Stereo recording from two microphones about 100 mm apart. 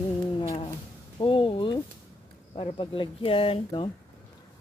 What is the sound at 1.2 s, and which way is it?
Speech, 60° left (ahead or behind).